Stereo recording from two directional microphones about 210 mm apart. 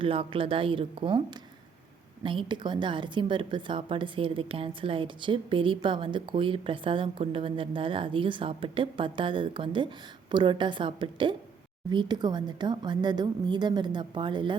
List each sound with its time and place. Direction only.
0.0 s a woman's voice: 25° right (ahead or behind)